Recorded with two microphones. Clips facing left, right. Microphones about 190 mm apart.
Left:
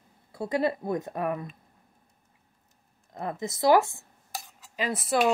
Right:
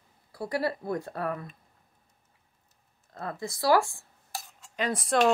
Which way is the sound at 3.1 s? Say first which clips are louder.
Left 3 dB; 20° left (ahead or behind).